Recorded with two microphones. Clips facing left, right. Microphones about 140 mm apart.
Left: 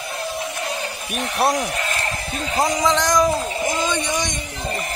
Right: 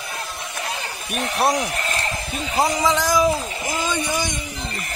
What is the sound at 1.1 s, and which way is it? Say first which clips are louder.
Speech: even; centre (ahead or behind).